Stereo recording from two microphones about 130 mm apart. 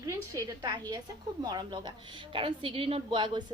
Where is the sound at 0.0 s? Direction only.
25° right (ahead or behind).